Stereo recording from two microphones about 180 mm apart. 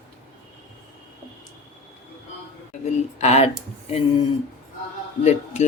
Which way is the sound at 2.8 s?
35° left (ahead or behind).